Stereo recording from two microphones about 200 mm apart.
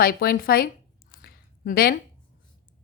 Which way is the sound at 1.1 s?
45° left (ahead or behind).